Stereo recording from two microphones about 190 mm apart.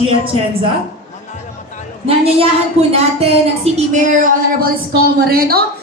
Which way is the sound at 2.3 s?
35° right (ahead or behind).